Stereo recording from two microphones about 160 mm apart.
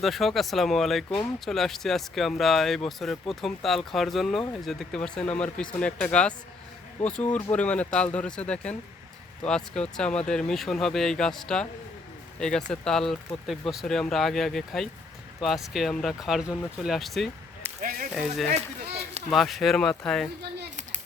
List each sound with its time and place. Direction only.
0.0 s speech: centre (ahead or behind)
17.7 s a sound: 60° right (ahead or behind)
18.1 s speech: 5° right (ahead or behind)